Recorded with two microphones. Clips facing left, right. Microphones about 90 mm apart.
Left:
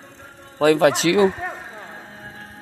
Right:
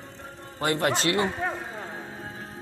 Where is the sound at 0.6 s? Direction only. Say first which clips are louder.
Left 9 dB; 90° left.